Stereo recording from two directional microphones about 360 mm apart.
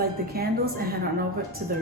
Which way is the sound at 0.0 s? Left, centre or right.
Right.